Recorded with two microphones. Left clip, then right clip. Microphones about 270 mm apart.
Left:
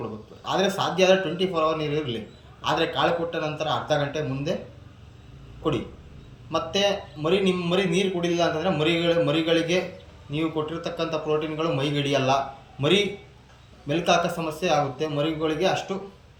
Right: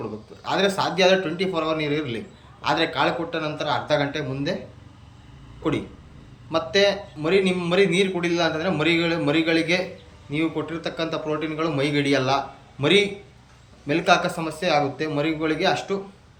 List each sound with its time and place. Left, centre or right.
0.4 s a man's voice: centre
6.5 s a man's voice: centre